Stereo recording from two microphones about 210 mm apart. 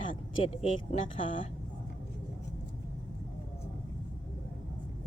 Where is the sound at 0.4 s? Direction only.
30° left (ahead or behind).